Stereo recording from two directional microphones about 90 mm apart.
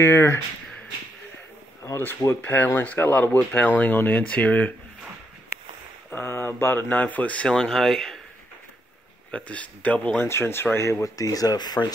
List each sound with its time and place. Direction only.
0.0 s speech: 30° left (ahead or behind)
2.0 s speech: 25° left (ahead or behind)
6.0 s speech: 25° left (ahead or behind); by 8.2 s 5° left (ahead or behind)
9.3 s speech: 15° left (ahead or behind)
10.1 s speech: 30° left (ahead or behind); by 11.9 s 50° left (ahead or behind)